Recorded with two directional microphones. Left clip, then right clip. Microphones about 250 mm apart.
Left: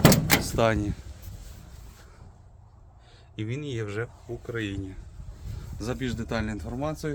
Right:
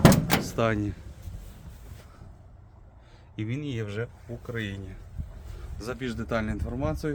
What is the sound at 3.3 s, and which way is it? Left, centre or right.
Speech, centre.